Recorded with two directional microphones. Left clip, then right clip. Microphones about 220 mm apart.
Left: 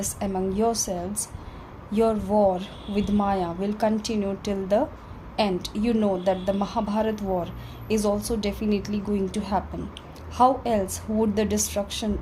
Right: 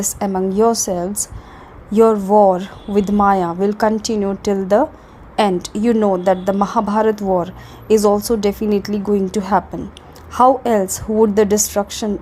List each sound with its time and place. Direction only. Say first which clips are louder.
0.0 s a woman's voice: right 8 dB; 35° right (ahead or behind)